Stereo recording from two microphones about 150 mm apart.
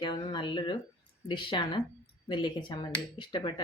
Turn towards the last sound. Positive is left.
turn(degrees=30)  # may be behind; listen again after turning